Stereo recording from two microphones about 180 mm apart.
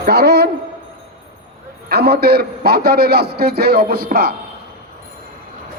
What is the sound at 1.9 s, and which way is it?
A man's voice, 65° right (ahead or behind).